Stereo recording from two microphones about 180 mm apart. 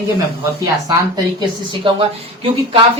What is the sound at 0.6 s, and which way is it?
Speech, 20° right (ahead or behind).